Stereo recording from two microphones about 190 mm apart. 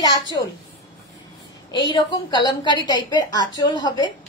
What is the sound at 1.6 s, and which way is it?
A woman's voice, 25° left (ahead or behind).